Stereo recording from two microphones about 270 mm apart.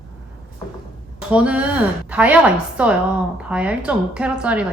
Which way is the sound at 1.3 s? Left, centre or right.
Centre.